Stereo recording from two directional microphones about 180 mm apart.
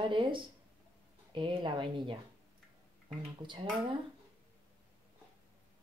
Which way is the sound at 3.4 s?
25° right (ahead or behind).